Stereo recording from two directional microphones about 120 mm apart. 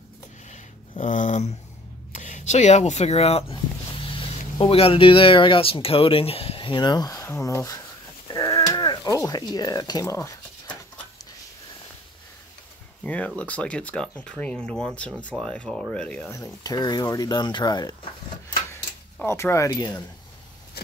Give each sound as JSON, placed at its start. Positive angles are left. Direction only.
{"t": 0.5, "sound": "a sound", "side_deg": 90}
{"t": 2.1, "sound": "speech", "side_deg": 90}
{"t": 8.3, "sound": "a sound", "side_deg": 30}
{"t": 13.0, "sound": "speech", "side_deg": 10}
{"t": 16.3, "sound": "speech", "side_deg": 30}
{"t": 19.2, "sound": "speech", "side_deg": 25}